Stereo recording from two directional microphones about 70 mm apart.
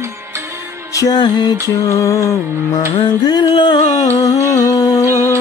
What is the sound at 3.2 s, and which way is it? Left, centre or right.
Music, left.